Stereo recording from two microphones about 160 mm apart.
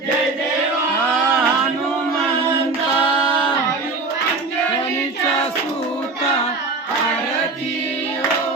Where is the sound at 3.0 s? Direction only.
30° left (ahead or behind).